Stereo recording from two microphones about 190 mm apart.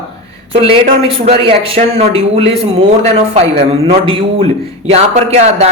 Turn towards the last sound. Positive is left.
turn(degrees=-35)  # may be behind; listen again after turning